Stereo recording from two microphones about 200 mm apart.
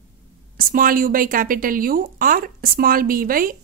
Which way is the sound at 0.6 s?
45° right (ahead or behind).